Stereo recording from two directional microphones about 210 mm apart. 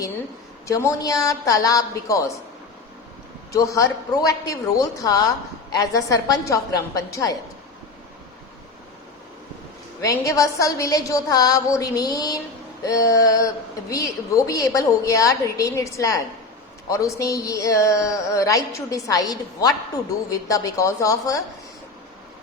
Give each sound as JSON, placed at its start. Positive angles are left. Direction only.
{"t": 0.7, "sound": "a woman's voice", "side_deg": 15}
{"t": 3.5, "sound": "a woman's voice", "side_deg": 15}
{"t": 10.0, "sound": "a woman's voice", "side_deg": 15}